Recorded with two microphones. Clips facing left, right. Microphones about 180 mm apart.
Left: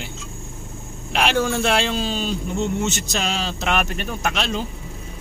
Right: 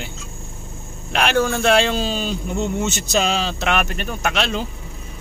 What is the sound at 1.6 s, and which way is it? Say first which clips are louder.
Speech: right 4 dB; centre (ahead or behind).